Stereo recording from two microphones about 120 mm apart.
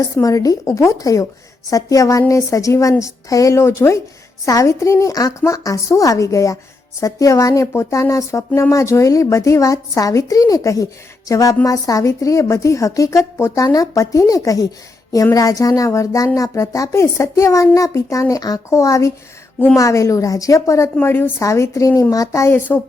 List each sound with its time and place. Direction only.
0.2 s speech: 25° left (ahead or behind)